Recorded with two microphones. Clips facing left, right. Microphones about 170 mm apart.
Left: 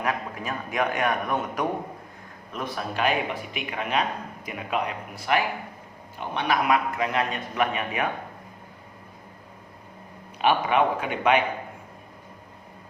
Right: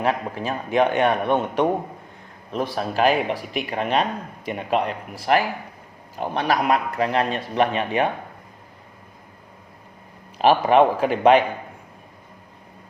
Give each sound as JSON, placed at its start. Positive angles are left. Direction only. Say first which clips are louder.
{"t": 0.0, "sound": "a man's voice", "louder": "right 5 dB", "side_deg": -30}
{"t": 10.3, "sound": "a man's voice", "louder": "right 6 dB", "side_deg": -35}